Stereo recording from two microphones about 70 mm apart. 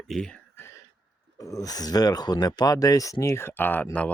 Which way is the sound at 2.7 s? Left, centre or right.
Left.